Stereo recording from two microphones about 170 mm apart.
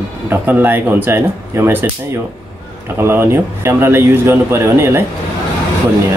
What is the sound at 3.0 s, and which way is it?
Speech, 15° right (ahead or behind).